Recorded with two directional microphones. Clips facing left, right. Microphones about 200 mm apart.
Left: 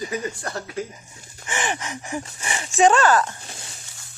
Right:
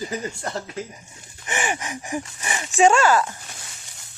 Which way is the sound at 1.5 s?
10° right (ahead or behind).